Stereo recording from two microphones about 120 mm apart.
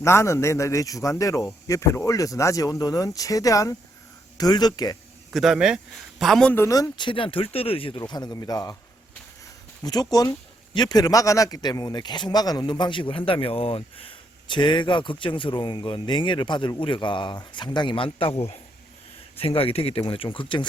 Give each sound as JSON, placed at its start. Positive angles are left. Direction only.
{"t": 0.0, "sound": "a man's voice", "side_deg": 25}
{"t": 5.3, "sound": "a man's voice", "side_deg": 0}
{"t": 6.5, "sound": "speech", "side_deg": 25}
{"t": 7.9, "sound": "a man's voice", "side_deg": 35}
{"t": 9.8, "sound": "a man's voice", "side_deg": 35}